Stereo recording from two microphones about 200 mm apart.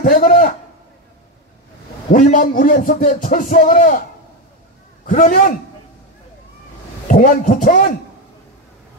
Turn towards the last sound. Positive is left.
turn(degrees=40)  # may be behind; listen again after turning